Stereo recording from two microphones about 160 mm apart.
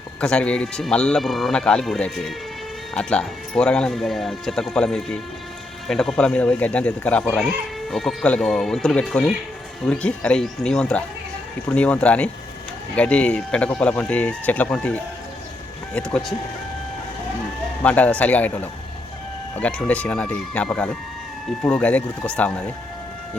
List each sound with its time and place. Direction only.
0.2 s speech: 5° left (ahead or behind)
17.8 s speech: 10° left (ahead or behind)